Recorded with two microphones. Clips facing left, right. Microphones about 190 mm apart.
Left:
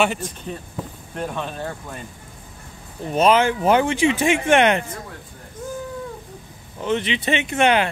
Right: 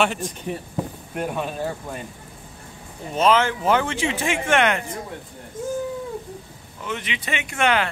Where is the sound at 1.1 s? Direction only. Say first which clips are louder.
Right 1 dB; 10° right (ahead or behind).